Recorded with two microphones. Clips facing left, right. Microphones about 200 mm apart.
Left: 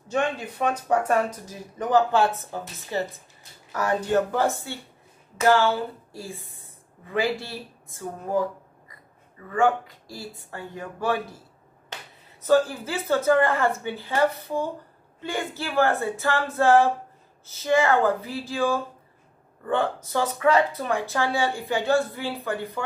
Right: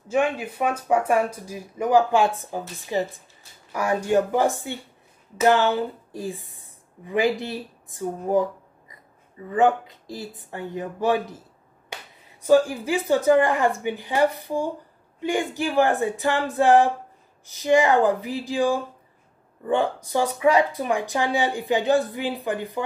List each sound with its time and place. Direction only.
0.1 s a woman's voice: 10° right (ahead or behind)